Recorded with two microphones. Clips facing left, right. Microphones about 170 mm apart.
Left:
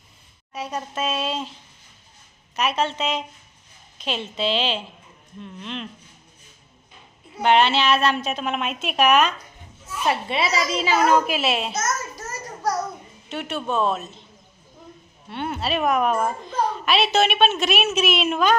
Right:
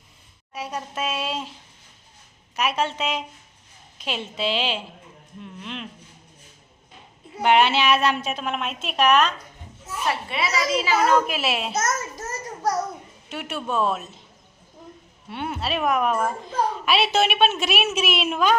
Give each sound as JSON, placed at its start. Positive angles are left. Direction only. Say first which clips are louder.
{"t": 0.5, "sound": "a woman's voice", "louder": "left 2 dB", "side_deg": -10}
{"t": 2.6, "sound": "a woman's voice", "louder": "left 1 dB", "side_deg": -10}
{"t": 7.4, "sound": "a woman's voice", "louder": "even", "side_deg": -10}
{"t": 10.1, "sound": "a woman's voice", "louder": "left 3 dB", "side_deg": 25}
{"t": 11.3, "sound": "a woman's voice", "louder": "left 2 dB", "side_deg": 0}
{"t": 13.2, "sound": "a woman's voice", "louder": "left 2 dB", "side_deg": -5}
{"t": 15.3, "sound": "a woman's voice", "louder": "left 2 dB", "side_deg": -5}